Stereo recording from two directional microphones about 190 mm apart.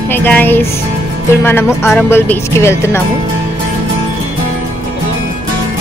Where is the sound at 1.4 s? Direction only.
10° left (ahead or behind).